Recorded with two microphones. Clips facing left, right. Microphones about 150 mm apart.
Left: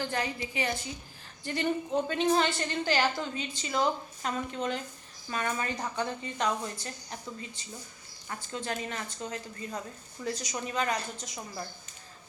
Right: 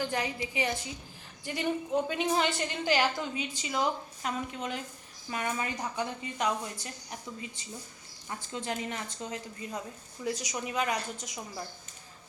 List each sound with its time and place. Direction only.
0.0 s a woman's voice: 15° right (ahead or behind)